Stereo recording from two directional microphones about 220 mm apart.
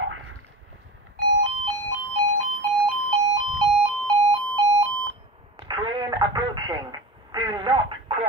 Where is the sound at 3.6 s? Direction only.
25° right (ahead or behind).